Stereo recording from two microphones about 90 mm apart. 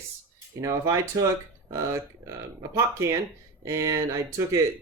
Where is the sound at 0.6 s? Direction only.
35° right (ahead or behind).